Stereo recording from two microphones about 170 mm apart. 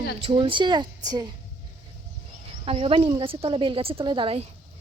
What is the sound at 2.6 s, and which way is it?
Speech, 35° right (ahead or behind).